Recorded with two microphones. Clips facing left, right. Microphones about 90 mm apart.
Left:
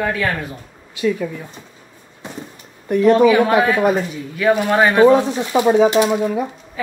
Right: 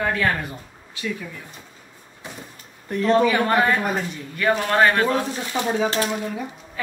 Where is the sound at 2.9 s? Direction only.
15° left (ahead or behind).